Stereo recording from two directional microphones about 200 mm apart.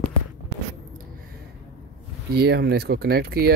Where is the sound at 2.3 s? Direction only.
50° right (ahead or behind).